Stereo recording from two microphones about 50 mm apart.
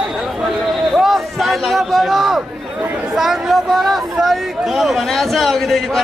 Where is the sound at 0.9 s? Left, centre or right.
Centre.